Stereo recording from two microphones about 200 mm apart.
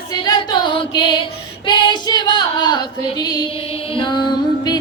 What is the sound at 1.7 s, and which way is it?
Female singing, 25° left (ahead or behind).